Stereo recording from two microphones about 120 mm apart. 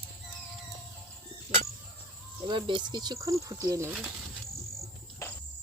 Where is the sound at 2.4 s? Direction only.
45° right (ahead or behind); by 3.9 s 25° right (ahead or behind).